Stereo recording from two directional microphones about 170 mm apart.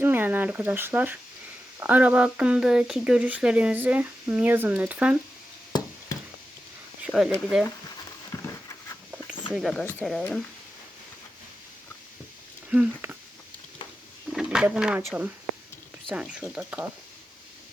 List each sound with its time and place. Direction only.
0.0 s speech: 10° right (ahead or behind)
7.0 s a sound: centre (ahead or behind)
7.3 s speech: 10° left (ahead or behind)
8.3 s dog: 15° left (ahead or behind)
9.6 s speech: centre (ahead or behind)
12.7 s speech: 10° right (ahead or behind)
14.3 s speech: 5° right (ahead or behind)